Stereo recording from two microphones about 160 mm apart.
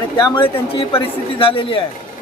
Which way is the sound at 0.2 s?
30° left (ahead or behind).